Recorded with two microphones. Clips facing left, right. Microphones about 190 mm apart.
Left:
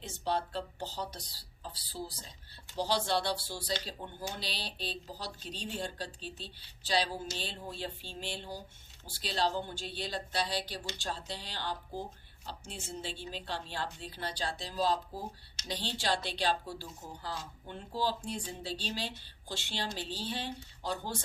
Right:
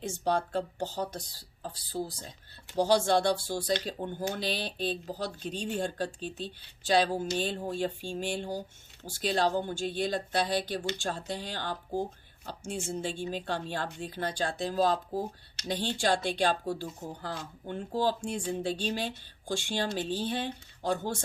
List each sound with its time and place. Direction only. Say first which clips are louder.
0.0 s speech: right 5 dB; 45° right (ahead or behind)